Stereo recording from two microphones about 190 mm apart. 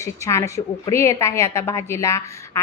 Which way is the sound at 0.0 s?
15° left (ahead or behind).